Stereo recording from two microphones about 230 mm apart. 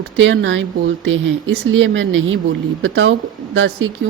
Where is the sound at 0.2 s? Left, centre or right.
Right.